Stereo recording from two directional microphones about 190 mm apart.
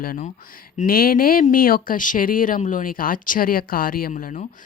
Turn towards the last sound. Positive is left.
turn(degrees=45)  # may be behind; listen again after turning